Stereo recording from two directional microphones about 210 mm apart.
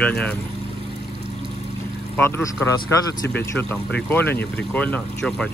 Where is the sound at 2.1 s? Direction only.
10° left (ahead or behind).